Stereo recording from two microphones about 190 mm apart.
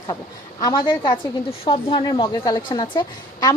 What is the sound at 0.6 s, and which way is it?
A woman's voice, 20° left (ahead or behind).